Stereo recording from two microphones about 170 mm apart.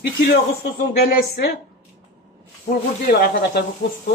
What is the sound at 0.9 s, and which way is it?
Speech, 65° left (ahead or behind).